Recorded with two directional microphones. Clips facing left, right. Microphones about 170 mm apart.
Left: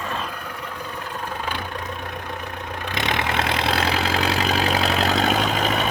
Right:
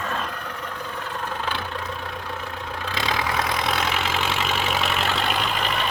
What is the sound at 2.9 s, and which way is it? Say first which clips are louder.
Vehicle: left 1 dB; 20° left (ahead or behind).